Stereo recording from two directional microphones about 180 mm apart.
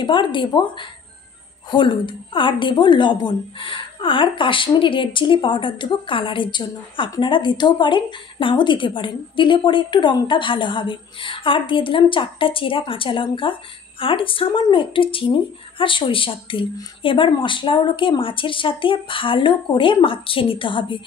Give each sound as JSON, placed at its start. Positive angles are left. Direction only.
{"t": 0.0, "sound": "a woman's voice", "side_deg": 25}